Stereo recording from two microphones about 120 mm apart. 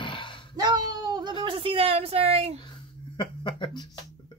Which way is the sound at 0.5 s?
35° right (ahead or behind).